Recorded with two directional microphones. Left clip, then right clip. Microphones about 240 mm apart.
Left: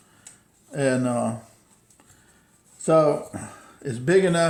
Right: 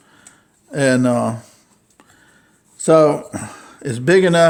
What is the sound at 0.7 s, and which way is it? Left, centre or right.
Speech, right.